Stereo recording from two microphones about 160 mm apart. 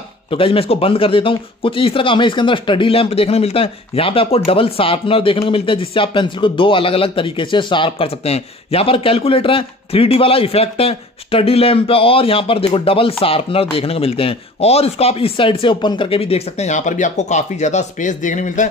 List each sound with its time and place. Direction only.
0.3 s speech: 35° left (ahead or behind); by 18.7 s 50° left (ahead or behind)